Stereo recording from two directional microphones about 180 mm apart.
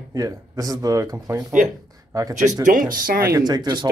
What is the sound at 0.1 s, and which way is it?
A man's voice, 20° right (ahead or behind).